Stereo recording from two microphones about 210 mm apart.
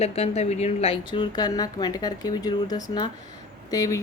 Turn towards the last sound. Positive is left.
turn(degrees=15)  # may be behind; listen again after turning